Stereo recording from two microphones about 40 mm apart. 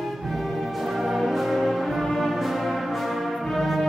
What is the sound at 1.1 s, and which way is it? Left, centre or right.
Music, centre.